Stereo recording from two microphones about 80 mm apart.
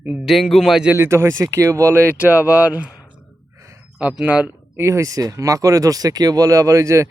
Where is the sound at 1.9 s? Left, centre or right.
Right.